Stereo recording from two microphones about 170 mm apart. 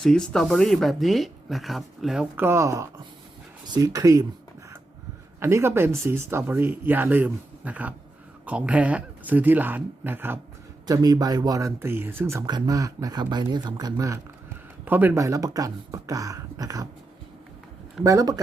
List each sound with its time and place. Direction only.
0.0 s speech: 5° left (ahead or behind); by 4.3 s 20° right (ahead or behind)
5.4 s speech: 15° right (ahead or behind)
10.8 s speech: 25° right (ahead or behind)
18.0 s speech: 20° right (ahead or behind)